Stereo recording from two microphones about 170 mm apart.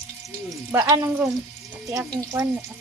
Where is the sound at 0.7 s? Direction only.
20° right (ahead or behind).